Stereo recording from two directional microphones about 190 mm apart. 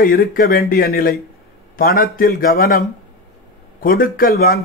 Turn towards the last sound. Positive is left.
turn(degrees=55)  # may be behind; listen again after turning